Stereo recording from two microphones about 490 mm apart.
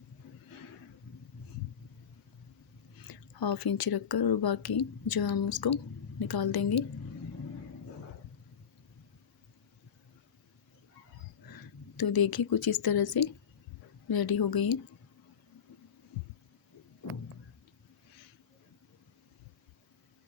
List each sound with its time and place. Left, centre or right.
3.0 s speech: left
11.9 s speech: left